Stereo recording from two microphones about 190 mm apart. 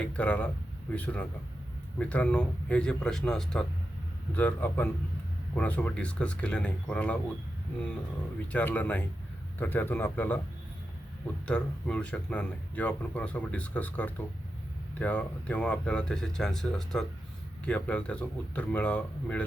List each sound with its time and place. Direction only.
0.0 s speech: 5° left (ahead or behind)
8.5 s speech: 10° left (ahead or behind)
11.4 s speech: 5° left (ahead or behind)